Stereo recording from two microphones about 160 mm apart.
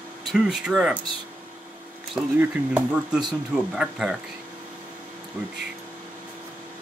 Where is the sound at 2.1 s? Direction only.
5° right (ahead or behind).